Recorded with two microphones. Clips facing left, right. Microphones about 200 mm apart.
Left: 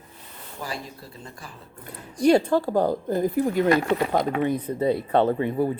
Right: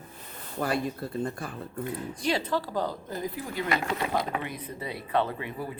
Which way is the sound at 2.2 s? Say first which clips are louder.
Left 11 dB; 45° left (ahead or behind).